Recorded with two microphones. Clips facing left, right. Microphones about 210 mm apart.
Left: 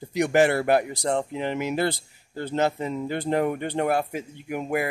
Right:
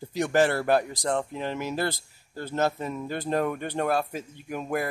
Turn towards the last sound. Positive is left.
turn(degrees=15)  # may be behind; listen again after turning